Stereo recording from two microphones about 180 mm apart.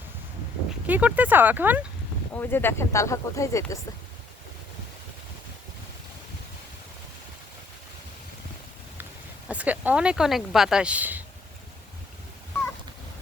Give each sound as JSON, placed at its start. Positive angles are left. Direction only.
{"t": 0.9, "sound": "speech", "side_deg": -10}
{"t": 2.3, "sound": "speech", "side_deg": 10}
{"t": 9.5, "sound": "speech", "side_deg": -10}